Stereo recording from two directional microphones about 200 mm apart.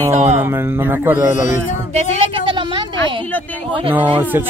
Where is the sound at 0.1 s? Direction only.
35° right (ahead or behind).